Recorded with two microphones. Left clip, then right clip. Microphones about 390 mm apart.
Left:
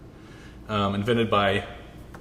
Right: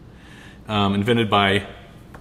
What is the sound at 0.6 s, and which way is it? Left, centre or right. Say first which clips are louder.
A man's voice: right 4 dB; right.